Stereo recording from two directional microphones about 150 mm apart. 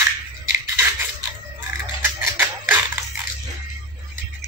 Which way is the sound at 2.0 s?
15° right (ahead or behind).